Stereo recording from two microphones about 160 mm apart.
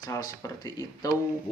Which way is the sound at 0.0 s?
25° left (ahead or behind).